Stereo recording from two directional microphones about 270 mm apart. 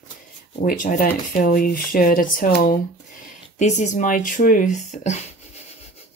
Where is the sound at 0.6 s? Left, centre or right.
Left.